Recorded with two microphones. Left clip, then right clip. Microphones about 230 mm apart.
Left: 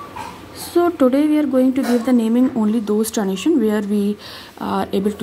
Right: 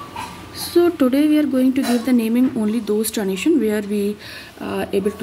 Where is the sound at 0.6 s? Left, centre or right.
Centre.